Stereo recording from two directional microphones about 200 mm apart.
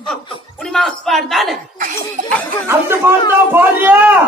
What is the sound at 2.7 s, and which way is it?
A man's voice, 10° right (ahead or behind).